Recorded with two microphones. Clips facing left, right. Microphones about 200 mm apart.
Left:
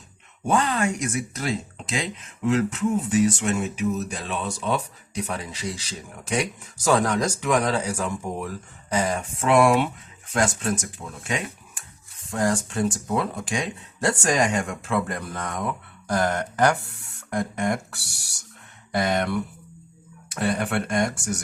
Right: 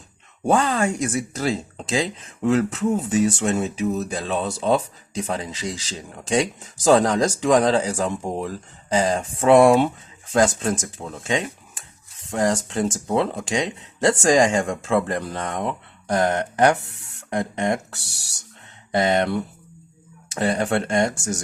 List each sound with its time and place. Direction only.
0.4 s speech: 30° right (ahead or behind)